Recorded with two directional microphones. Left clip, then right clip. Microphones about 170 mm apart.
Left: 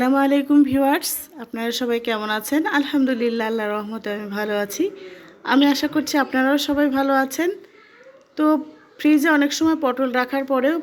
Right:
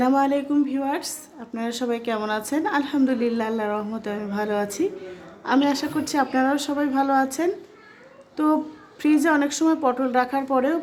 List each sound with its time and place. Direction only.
0.0 s a woman's voice: 20° left (ahead or behind)
0.6 s a woman's voice: 40° left (ahead or behind); by 10.8 s 15° left (ahead or behind)